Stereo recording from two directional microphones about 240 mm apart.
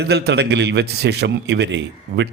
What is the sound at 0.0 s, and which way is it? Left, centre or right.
Speech, right.